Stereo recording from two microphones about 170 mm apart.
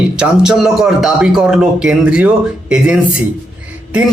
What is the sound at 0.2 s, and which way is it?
A man's voice, 5° right (ahead or behind).